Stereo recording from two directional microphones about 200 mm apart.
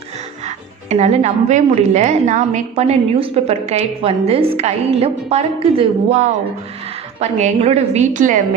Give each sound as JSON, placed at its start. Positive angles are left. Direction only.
{"t": 0.4, "sound": "a woman's voice", "side_deg": -35}